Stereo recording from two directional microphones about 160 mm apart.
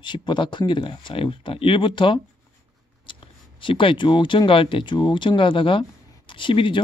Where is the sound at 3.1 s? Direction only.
30° left (ahead or behind).